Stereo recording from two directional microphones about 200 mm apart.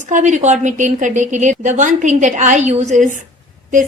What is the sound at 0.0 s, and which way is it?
A woman's voice, 40° right (ahead or behind).